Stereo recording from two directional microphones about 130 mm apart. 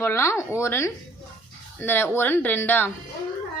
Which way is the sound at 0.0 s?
20° left (ahead or behind).